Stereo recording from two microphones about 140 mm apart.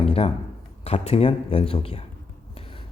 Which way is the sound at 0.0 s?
45° left (ahead or behind).